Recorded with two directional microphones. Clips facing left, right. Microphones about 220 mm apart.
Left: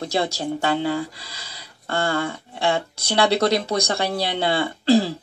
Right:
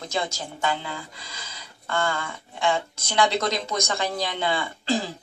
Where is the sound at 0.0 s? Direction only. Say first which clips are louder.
Left 6 dB; 35° left (ahead or behind).